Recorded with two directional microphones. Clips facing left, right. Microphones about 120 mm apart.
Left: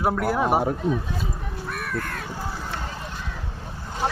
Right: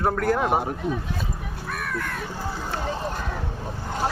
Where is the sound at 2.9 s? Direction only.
40° right (ahead or behind).